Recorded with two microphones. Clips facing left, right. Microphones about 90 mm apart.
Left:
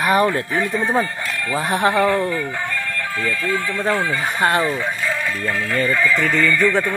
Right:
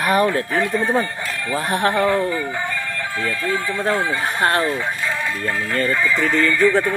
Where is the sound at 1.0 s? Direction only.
15° right (ahead or behind).